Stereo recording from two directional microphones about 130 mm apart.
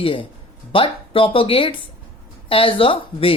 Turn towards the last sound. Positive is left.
turn(degrees=45)  # may be behind; listen again after turning